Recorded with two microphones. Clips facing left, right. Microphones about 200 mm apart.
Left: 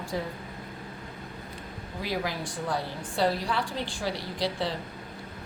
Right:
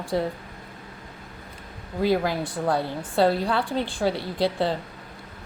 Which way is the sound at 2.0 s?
55° right (ahead or behind).